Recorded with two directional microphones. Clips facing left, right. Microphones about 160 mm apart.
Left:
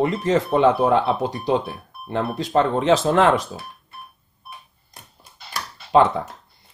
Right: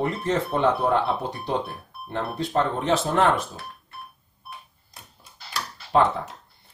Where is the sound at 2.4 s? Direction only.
90° left.